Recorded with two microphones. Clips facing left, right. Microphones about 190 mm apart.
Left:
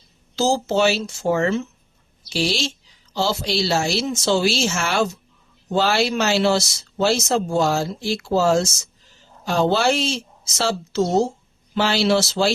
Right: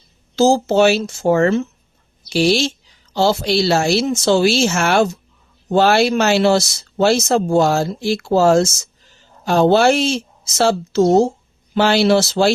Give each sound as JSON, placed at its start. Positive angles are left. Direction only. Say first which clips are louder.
{"t": 0.3, "sound": "a woman's voice", "louder": "right 6 dB", "side_deg": -50}